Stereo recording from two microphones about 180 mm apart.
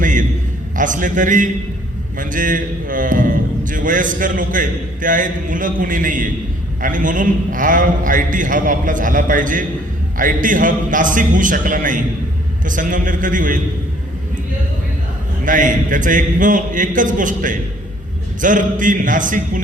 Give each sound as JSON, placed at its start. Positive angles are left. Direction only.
{"t": 0.0, "sound": "a sound", "side_deg": -45}
{"t": 0.8, "sound": "a man's voice", "side_deg": -45}
{"t": 15.4, "sound": "a man's voice", "side_deg": -45}